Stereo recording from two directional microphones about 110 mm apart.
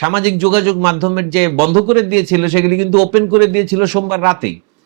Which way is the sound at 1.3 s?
10° right (ahead or behind).